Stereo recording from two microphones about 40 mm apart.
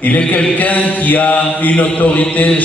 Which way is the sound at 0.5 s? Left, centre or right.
Left.